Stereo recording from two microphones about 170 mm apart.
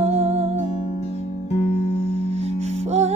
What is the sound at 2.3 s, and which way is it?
Music, 40° right (ahead or behind).